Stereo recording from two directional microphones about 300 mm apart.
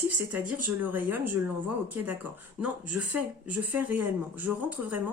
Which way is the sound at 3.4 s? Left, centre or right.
Centre.